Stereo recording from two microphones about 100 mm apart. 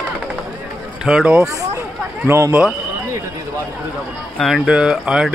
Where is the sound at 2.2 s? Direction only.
25° right (ahead or behind).